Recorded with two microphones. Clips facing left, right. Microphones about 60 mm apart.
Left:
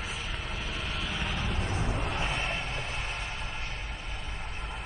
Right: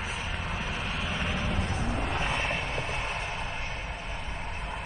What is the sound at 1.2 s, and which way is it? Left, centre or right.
Music, centre.